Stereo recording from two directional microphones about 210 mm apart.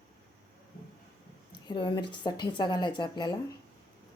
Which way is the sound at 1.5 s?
25° left (ahead or behind).